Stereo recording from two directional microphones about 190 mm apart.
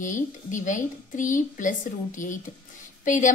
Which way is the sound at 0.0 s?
40° left (ahead or behind).